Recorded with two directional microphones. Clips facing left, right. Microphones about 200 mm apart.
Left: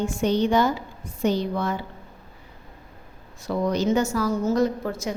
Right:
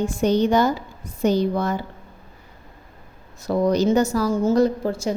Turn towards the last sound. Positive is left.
turn(degrees=-30)  # may be behind; listen again after turning